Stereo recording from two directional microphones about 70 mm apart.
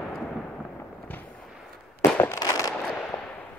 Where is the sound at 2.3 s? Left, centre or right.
Left.